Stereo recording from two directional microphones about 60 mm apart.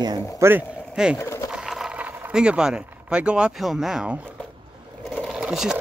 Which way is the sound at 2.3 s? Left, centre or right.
Centre.